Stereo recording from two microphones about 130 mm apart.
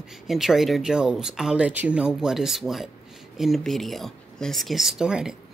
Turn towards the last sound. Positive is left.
turn(degrees=-5)  # may be behind; listen again after turning